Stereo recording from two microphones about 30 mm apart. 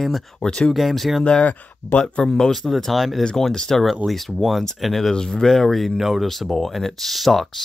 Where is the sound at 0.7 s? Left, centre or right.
Centre.